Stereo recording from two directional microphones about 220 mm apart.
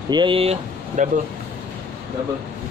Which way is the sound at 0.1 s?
20° right (ahead or behind).